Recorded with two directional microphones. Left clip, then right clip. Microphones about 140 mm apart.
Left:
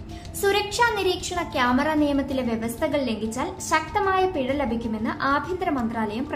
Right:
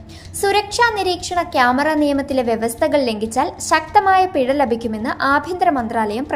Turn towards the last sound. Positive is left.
turn(degrees=-45)  # may be behind; listen again after turning